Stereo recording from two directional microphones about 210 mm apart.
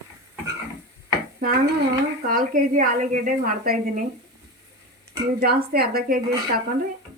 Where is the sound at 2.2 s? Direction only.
45° right (ahead or behind).